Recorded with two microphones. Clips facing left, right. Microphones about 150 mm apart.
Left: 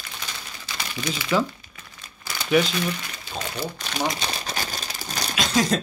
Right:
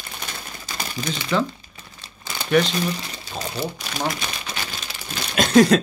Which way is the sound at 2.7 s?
30° right (ahead or behind).